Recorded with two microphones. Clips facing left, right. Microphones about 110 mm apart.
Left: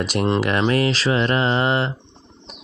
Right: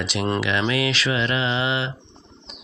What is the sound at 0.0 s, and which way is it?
Speech, 45° left (ahead or behind).